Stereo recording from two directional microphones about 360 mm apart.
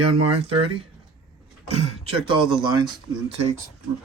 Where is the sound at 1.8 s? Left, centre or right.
Centre.